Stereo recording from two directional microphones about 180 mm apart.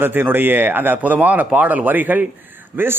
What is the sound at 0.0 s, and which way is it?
A man's voice, 10° right (ahead or behind).